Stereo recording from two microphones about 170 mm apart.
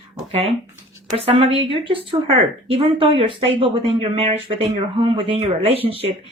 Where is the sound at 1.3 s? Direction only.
35° right (ahead or behind).